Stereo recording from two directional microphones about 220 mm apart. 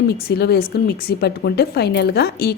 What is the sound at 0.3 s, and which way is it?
Speech, 45° left (ahead or behind).